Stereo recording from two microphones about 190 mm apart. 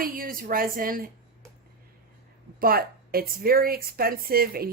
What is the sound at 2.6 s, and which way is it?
A woman's voice, 50° right (ahead or behind).